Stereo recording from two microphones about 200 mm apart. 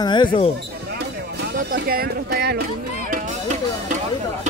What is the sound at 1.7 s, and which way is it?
Speech, 50° right (ahead or behind).